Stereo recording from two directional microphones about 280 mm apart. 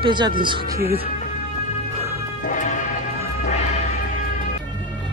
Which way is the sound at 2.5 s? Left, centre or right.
Left.